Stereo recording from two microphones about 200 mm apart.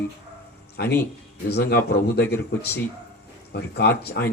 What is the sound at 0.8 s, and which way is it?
Speech, 55° left (ahead or behind).